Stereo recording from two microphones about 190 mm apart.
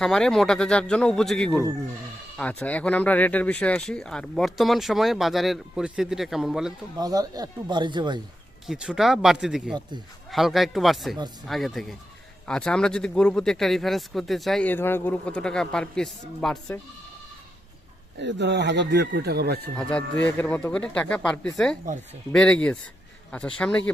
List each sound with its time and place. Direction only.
0.0 s speech: 5° left (ahead or behind)
7.0 s speech: 20° right (ahead or behind)
8.6 s speech: 5° right (ahead or behind)
18.2 s speech: 65° right (ahead or behind)
19.7 s speech: 5° left (ahead or behind)